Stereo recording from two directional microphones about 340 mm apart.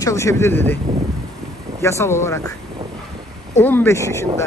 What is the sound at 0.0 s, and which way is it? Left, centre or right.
Speech, centre.